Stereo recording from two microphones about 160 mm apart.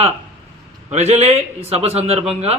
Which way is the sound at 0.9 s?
40° right (ahead or behind).